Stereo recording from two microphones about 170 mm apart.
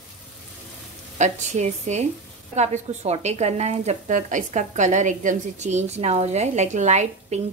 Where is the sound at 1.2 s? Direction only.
45° right (ahead or behind).